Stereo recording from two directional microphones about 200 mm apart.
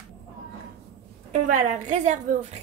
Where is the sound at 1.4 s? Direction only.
35° right (ahead or behind).